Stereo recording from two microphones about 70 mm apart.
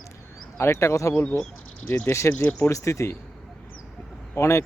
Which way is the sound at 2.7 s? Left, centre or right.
Left.